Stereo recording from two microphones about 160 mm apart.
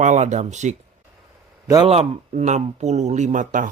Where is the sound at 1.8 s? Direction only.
40° right (ahead or behind).